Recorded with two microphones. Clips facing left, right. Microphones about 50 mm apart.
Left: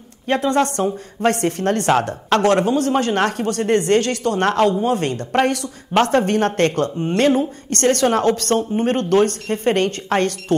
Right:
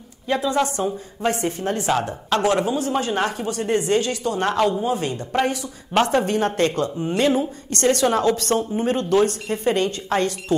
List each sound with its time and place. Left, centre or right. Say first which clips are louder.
0.3 s a woman's voice: left 3 dB; left